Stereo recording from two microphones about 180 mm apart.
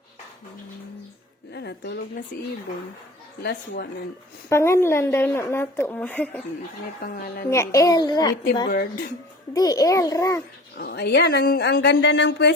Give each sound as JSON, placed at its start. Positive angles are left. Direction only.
{"t": 1.5, "sound": "speech", "side_deg": 70}
{"t": 3.4, "sound": "speech", "side_deg": 70}
{"t": 4.4, "sound": "a woman's voice", "side_deg": 15}
{"t": 7.5, "sound": "a child's voice", "side_deg": 15}
{"t": 8.6, "sound": "speech", "side_deg": 60}
{"t": 9.5, "sound": "a child's voice", "side_deg": 20}
{"t": 10.8, "sound": "speech", "side_deg": 60}